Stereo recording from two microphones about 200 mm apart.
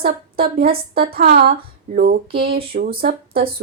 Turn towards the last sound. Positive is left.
turn(degrees=-50)  # may be behind; listen again after turning